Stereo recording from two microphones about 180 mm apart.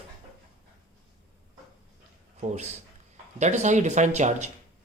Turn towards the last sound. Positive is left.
turn(degrees=-40)  # may be behind; listen again after turning